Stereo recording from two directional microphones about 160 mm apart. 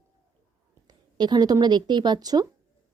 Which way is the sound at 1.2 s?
25° right (ahead or behind).